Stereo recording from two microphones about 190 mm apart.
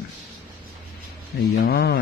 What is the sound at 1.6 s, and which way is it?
Speech, 55° left (ahead or behind).